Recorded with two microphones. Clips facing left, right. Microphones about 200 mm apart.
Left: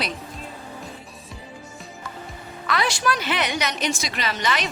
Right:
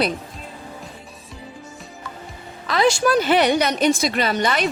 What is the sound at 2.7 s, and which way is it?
Speech, 45° right (ahead or behind).